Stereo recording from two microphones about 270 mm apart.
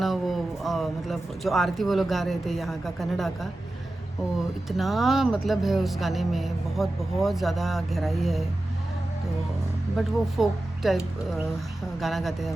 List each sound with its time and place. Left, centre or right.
0.0 s speech: centre
4.8 s speech: centre
10.0 s speech: centre